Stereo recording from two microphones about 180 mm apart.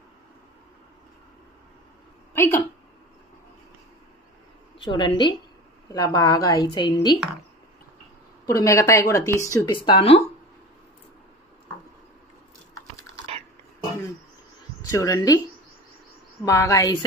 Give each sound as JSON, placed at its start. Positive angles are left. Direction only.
{"t": 2.3, "sound": "a woman's voice", "side_deg": 15}
{"t": 4.8, "sound": "speech", "side_deg": 25}
{"t": 8.5, "sound": "speech", "side_deg": 15}
{"t": 9.8, "sound": "speech", "side_deg": 30}
{"t": 14.9, "sound": "speech", "side_deg": 20}
{"t": 16.4, "sound": "speech", "side_deg": 15}